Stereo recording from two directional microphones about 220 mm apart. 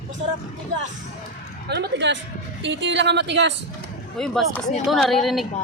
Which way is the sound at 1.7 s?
50° right (ahead or behind).